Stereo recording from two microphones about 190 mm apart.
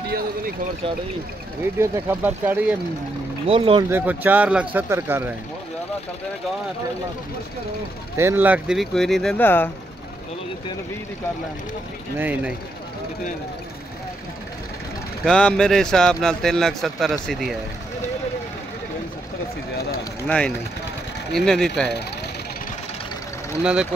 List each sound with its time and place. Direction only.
1.8 s speech: 10° right (ahead or behind)
3.4 s speech: 30° right (ahead or behind)
3.9 s speech: 10° right (ahead or behind)
8.2 s speech: 10° right (ahead or behind); by 9.7 s 10° left (ahead or behind)
12.2 s speech: 10° right (ahead or behind)
15.2 s speech: 5° left (ahead or behind)
20.2 s speech: 5° left (ahead or behind)
23.6 s speech: 5° right (ahead or behind)